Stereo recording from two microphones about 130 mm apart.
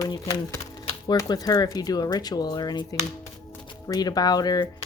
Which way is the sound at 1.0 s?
30° left (ahead or behind).